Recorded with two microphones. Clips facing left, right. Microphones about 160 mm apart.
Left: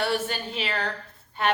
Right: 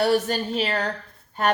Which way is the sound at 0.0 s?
40° right (ahead or behind).